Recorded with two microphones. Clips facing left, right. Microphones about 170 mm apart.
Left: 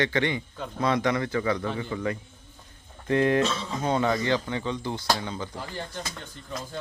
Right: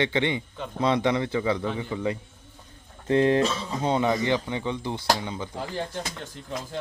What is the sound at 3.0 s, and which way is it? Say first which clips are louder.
A man's voice: right 2 dB; 25° right (ahead or behind).